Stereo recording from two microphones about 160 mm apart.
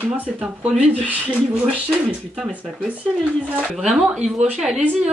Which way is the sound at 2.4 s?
5° right (ahead or behind).